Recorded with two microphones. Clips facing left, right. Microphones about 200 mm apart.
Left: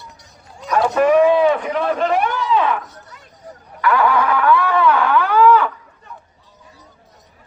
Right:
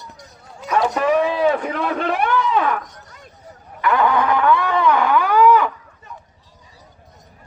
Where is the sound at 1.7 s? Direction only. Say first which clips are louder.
Left 4 dB; 60° right (ahead or behind).